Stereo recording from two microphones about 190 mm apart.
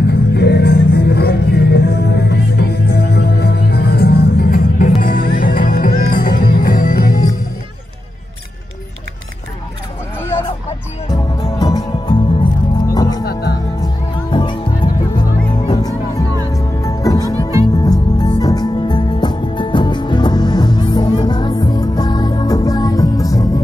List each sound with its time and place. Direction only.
0.0 s music: 60° left (ahead or behind)
11.1 s music: 20° left (ahead or behind)
13.2 s music: 55° left (ahead or behind)
13.7 s music: 25° left (ahead or behind)